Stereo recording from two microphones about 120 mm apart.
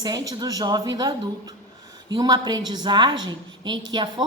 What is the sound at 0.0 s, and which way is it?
A woman's voice, 35° right (ahead or behind).